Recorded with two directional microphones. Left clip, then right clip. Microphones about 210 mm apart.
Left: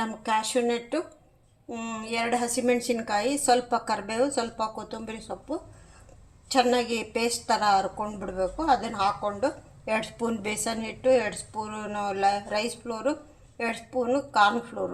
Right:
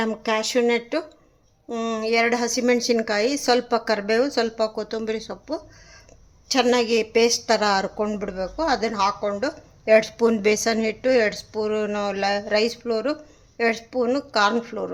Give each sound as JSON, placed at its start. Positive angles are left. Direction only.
{"t": 0.0, "sound": "a woman's voice", "side_deg": -35}